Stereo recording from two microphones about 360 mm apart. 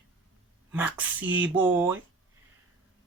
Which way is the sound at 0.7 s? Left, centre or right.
Centre.